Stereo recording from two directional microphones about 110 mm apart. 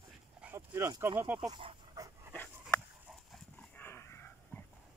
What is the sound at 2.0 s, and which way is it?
Dog, 30° right (ahead or behind).